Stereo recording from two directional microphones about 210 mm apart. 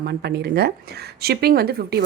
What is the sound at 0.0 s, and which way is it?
Speech, 50° right (ahead or behind).